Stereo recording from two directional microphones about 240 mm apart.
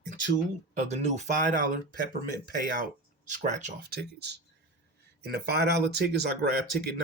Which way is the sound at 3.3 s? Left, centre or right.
Right.